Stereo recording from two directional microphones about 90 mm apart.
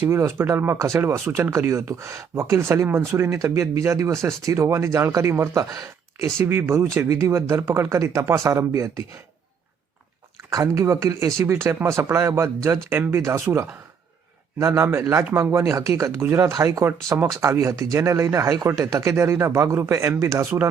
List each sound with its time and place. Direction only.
0.0 s speech: 25° right (ahead or behind)
6.4 s speech: 25° right (ahead or behind)
10.5 s speech: 35° right (ahead or behind)
14.6 s speech: 30° right (ahead or behind)